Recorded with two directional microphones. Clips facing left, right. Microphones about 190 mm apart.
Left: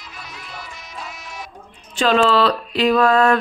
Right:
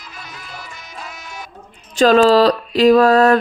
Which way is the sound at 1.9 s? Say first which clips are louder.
Right 5 dB; 40° right (ahead or behind).